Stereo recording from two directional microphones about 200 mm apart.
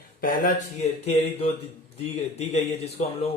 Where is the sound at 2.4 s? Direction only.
35° left (ahead or behind).